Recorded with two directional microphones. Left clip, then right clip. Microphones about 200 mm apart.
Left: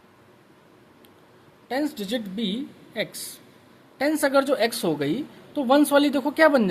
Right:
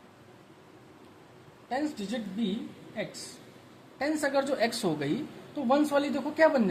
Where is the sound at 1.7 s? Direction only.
45° left (ahead or behind).